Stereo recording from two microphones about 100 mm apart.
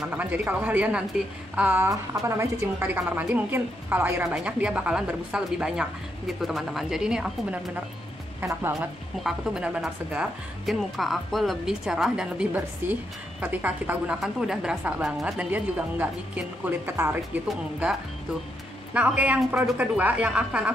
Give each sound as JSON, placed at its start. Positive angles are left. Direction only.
{"t": 0.1, "sound": "a woman's voice", "side_deg": -15}
{"t": 1.9, "sound": "a woman's voice", "side_deg": -30}
{"t": 8.7, "sound": "a woman's voice", "side_deg": 0}
{"t": 13.4, "sound": "a woman's voice", "side_deg": -15}
{"t": 14.2, "sound": "a woman's voice", "side_deg": -5}
{"t": 18.9, "sound": "a woman's voice", "side_deg": -15}